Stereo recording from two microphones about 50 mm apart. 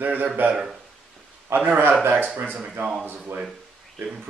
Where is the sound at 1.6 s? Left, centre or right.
Right.